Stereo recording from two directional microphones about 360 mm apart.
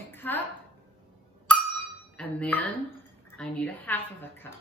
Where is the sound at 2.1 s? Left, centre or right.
Centre.